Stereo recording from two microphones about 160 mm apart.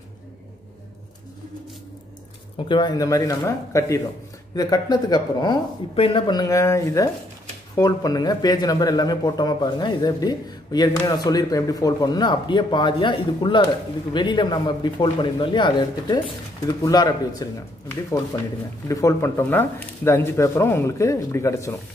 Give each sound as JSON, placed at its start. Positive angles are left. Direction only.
{"t": 2.5, "sound": "speech", "side_deg": 30}
{"t": 18.9, "sound": "speech", "side_deg": 20}